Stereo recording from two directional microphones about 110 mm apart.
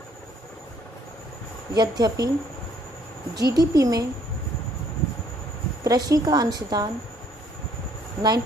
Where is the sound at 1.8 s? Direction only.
35° right (ahead or behind).